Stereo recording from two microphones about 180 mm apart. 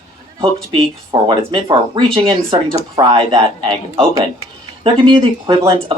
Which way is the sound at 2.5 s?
30° right (ahead or behind).